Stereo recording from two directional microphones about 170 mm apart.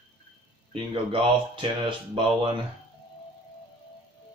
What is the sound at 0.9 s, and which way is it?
Speech, 30° right (ahead or behind).